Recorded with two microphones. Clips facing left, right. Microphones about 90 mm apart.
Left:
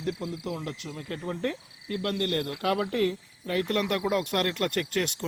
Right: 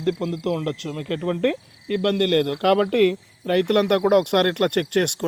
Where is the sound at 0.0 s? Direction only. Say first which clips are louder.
Right 9 dB; 90° right.